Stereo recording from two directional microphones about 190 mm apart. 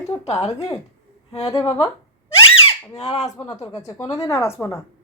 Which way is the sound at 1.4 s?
20° left (ahead or behind).